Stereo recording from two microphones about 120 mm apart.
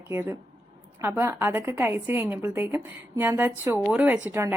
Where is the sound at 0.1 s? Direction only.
15° right (ahead or behind).